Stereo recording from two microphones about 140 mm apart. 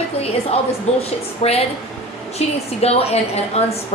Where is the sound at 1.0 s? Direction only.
45° left (ahead or behind).